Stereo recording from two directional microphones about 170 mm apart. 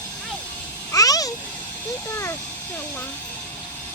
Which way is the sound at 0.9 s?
20° left (ahead or behind).